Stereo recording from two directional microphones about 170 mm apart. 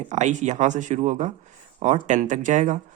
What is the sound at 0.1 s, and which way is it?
Speech, 45° right (ahead or behind).